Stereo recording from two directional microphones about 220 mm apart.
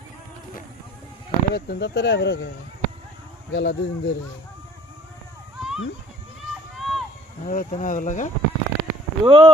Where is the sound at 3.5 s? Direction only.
50° left (ahead or behind).